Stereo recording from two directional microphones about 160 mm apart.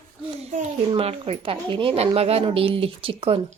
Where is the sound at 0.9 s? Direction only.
40° right (ahead or behind).